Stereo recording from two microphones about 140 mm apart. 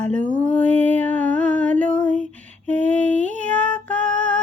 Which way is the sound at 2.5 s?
60° right (ahead or behind).